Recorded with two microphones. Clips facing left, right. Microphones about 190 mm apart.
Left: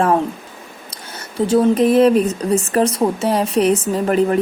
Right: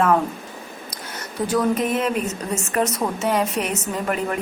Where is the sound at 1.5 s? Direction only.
30° left (ahead or behind).